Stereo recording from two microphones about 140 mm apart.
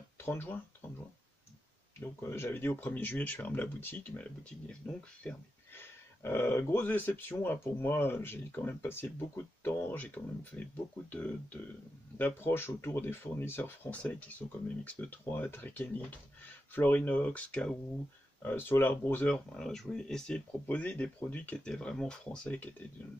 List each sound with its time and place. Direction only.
0.2 s speech: 15° left (ahead or behind)
2.0 s speech: 15° left (ahead or behind)